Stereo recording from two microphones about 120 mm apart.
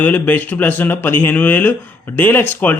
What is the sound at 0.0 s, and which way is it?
Speech, 15° left (ahead or behind).